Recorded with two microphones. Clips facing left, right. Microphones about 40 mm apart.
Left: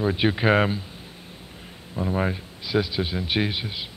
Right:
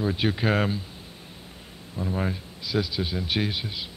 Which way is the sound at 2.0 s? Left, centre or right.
Centre.